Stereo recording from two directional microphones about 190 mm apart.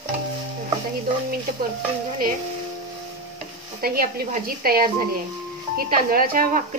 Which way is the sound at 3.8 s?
50° right (ahead or behind).